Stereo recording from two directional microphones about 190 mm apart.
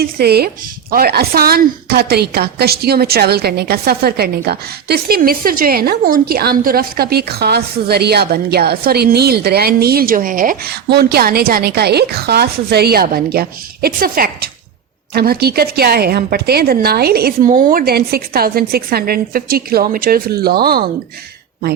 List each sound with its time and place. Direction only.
0.0 s a woman's voice: 55° right (ahead or behind)